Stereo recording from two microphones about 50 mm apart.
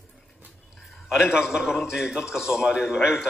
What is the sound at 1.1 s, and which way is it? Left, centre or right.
A man's voice, centre.